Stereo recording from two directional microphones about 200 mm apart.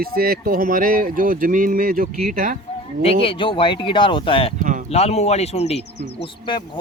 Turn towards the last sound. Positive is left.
turn(degrees=25)  # may be behind; listen again after turning